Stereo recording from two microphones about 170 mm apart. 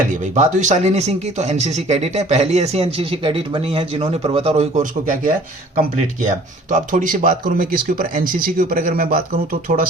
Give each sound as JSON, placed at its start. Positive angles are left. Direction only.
{"t": 0.1, "sound": "speech", "side_deg": -45}